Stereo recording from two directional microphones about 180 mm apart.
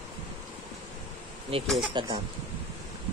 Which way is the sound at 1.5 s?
30° right (ahead or behind).